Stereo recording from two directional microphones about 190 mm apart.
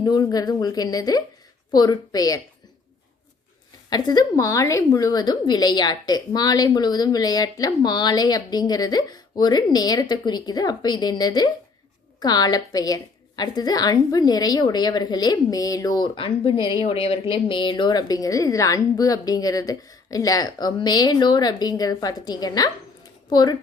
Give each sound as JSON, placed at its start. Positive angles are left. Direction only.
{"t": 0.0, "sound": "a woman's voice", "side_deg": 20}
{"t": 3.8, "sound": "a woman's voice", "side_deg": 20}